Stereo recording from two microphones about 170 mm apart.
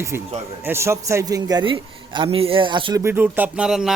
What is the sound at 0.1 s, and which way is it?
A man's voice, 15° right (ahead or behind).